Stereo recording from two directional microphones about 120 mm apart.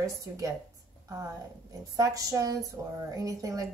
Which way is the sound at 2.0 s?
30° right (ahead or behind).